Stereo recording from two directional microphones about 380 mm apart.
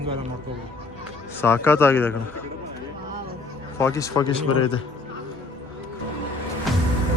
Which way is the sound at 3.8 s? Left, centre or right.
Centre.